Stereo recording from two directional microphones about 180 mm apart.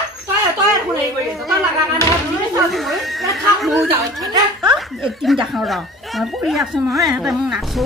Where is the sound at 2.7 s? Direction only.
Centre (ahead or behind).